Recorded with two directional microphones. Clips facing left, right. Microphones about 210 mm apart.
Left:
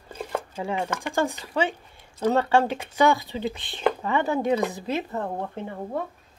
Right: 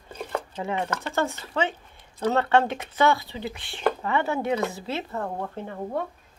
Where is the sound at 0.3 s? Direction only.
10° left (ahead or behind).